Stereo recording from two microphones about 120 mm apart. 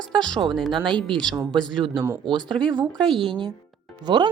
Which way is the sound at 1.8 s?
40° right (ahead or behind).